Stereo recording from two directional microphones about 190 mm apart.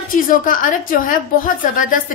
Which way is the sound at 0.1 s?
45° left (ahead or behind).